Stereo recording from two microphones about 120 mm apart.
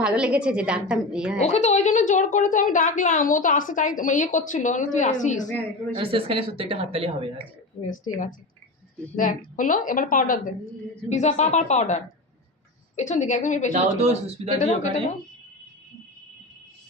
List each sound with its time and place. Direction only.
0.0 s a woman's voice: 10° right (ahead or behind)
1.4 s a woman's voice: 70° left (ahead or behind); by 5.5 s 90° left
5.9 s a woman's voice: 45° right (ahead or behind)
8.0 s a woman's voice: 90° left
13.0 s a woman's voice: 90° left
13.7 s a man's voice: 65° right (ahead or behind)
14.6 s a woman's voice: 90° left